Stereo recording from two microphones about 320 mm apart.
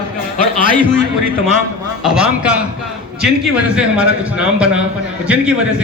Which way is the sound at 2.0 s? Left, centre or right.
Centre.